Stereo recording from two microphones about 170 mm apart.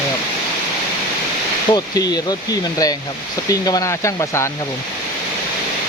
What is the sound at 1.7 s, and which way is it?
Speech, 25° left (ahead or behind).